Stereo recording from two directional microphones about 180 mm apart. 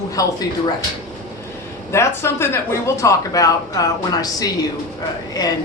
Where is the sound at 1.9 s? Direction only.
15° left (ahead or behind).